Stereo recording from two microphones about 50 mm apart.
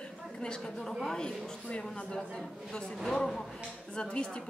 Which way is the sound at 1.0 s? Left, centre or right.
Centre.